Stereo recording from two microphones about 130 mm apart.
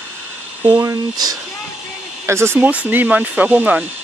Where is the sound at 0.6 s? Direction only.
25° right (ahead or behind).